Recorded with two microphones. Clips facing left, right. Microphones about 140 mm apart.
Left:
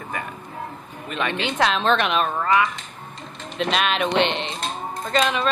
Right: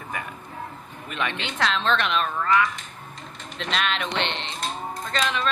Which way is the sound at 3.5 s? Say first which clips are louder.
Left 5 dB; 10° left (ahead or behind).